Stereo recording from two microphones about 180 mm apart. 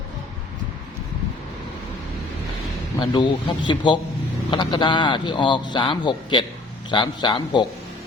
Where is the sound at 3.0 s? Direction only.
25° left (ahead or behind).